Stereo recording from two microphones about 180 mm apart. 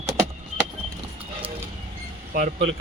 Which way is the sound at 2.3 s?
45° right (ahead or behind).